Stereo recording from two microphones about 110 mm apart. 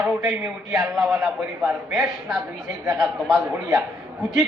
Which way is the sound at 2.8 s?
30° right (ahead or behind).